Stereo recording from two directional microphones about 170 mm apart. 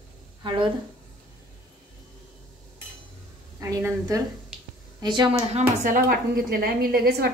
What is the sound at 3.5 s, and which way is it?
A woman's voice, 20° right (ahead or behind).